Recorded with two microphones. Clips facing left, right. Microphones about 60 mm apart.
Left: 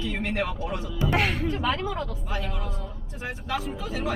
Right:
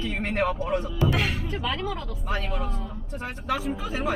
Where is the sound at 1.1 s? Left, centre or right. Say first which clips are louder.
Left 6 dB; left.